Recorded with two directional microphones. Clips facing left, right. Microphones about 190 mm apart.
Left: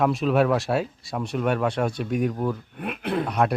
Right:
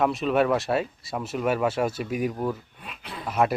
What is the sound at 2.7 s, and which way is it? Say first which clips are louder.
Speech: left 14 dB; 60° left (ahead or behind).